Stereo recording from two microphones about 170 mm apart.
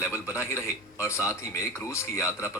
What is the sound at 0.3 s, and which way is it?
Speech, 15° left (ahead or behind).